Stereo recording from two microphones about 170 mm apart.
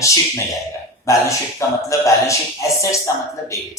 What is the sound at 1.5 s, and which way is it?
Speech, 20° left (ahead or behind).